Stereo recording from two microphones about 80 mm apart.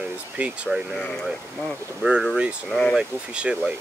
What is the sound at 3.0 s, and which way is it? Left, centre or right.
Speech, centre.